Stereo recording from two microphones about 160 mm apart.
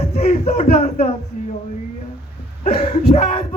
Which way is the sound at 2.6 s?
45° left (ahead or behind).